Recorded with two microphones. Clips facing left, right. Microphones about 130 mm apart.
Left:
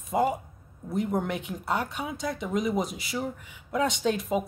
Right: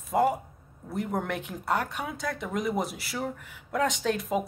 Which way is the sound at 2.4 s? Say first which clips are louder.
Left 2 dB; centre (ahead or behind).